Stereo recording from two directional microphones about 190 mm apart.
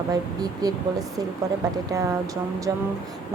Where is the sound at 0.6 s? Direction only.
20° right (ahead or behind).